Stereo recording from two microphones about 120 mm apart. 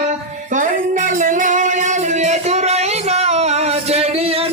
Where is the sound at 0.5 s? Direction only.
90° right.